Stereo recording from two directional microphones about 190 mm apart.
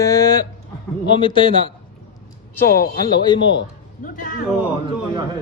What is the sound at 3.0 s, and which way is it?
Speech, 25° left (ahead or behind).